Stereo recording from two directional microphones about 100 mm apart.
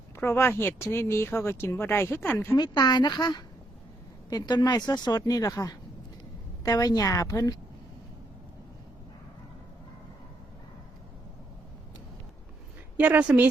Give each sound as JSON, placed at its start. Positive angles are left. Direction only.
{"t": 0.2, "sound": "speech", "side_deg": 25}
{"t": 2.6, "sound": "a woman's voice", "side_deg": 45}
{"t": 13.0, "sound": "a woman's voice", "side_deg": -15}